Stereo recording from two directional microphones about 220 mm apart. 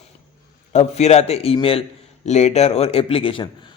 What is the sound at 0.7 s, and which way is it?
A man's voice, 30° left (ahead or behind).